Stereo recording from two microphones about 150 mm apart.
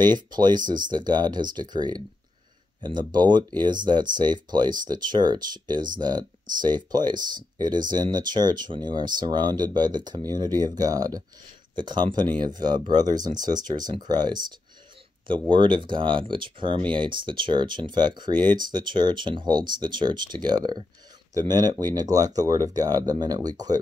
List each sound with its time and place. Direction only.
0.1 s speech: 30° right (ahead or behind)